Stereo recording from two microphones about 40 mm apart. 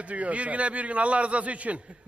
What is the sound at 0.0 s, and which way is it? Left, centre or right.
Speech, right.